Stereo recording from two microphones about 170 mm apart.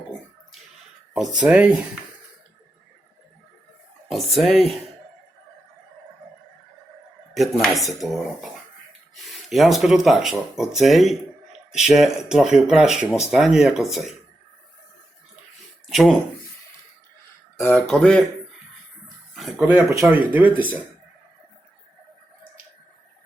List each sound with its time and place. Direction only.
1.1 s speech: centre (ahead or behind)
4.1 s speech: centre (ahead or behind)
7.3 s speech: centre (ahead or behind)
15.9 s speech: centre (ahead or behind)
17.6 s speech: 10° left (ahead or behind)
19.0 s a sound: centre (ahead or behind)
19.6 s speech: 10° right (ahead or behind)